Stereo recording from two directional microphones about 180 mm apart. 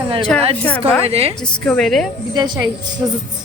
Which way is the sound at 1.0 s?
35° right (ahead or behind).